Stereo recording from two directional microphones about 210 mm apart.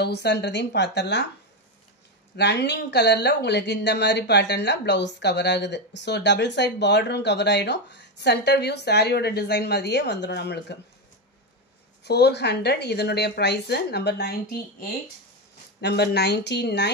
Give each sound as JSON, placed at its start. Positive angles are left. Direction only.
{"t": 0.0, "sound": "a woman's voice", "side_deg": 50}
{"t": 2.3, "sound": "speech", "side_deg": 55}
{"t": 12.0, "sound": "a woman's voice", "side_deg": 50}
{"t": 15.8, "sound": "a woman's voice", "side_deg": 50}